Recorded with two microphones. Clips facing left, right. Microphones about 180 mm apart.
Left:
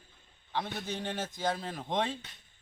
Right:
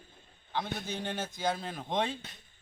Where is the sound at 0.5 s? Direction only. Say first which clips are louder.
Even; centre (ahead or behind).